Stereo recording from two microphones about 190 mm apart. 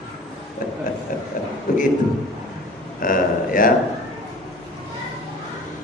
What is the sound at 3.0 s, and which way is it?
Speech, 45° left (ahead or behind).